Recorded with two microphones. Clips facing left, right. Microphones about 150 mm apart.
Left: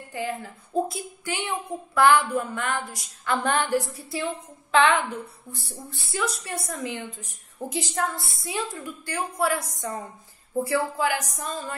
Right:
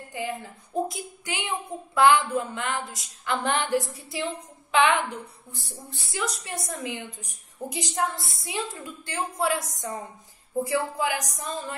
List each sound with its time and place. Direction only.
0.1 s a woman's voice: 15° right (ahead or behind)
0.8 s a sound: 20° right (ahead or behind)
2.0 s a woman's voice: 20° right (ahead or behind)